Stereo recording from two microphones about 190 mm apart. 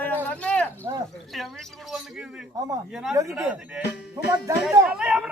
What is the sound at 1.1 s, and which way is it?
Speech, centre (ahead or behind).